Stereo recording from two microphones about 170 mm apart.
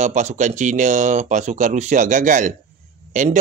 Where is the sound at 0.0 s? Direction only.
45° right (ahead or behind).